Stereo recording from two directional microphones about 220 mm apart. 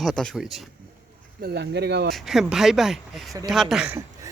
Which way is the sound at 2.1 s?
Centre (ahead or behind).